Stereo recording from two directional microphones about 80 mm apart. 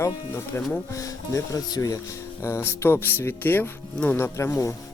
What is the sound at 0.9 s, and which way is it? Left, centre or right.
Speech, left.